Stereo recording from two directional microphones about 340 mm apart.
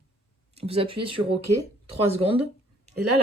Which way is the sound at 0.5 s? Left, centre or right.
Centre.